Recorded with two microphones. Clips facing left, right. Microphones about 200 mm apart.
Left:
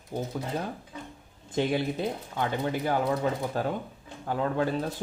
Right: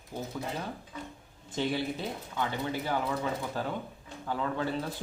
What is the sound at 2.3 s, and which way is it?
Speech, 45° left (ahead or behind).